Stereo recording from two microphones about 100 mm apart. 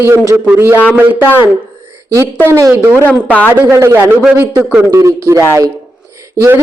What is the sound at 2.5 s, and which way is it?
Speech, 30° right (ahead or behind).